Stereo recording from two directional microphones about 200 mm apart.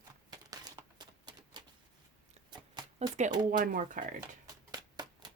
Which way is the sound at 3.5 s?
40° right (ahead or behind).